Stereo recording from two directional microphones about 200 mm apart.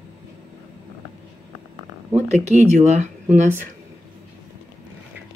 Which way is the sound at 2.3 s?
35° right (ahead or behind).